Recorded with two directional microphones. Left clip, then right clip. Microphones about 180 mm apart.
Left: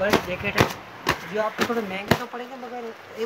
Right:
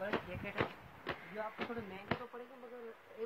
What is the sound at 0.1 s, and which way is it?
Speech, 60° left (ahead or behind).